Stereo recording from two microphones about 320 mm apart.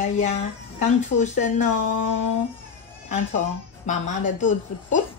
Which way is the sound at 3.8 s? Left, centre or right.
Left.